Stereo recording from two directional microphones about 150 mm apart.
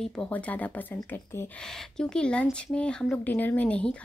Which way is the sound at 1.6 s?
5° left (ahead or behind).